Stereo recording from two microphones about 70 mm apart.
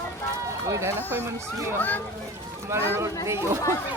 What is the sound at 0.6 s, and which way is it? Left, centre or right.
Speech, right.